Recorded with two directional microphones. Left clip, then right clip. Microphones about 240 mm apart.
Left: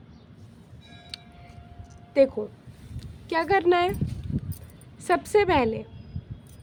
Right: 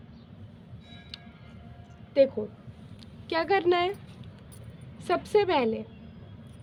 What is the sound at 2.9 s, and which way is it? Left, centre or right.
Speech, centre.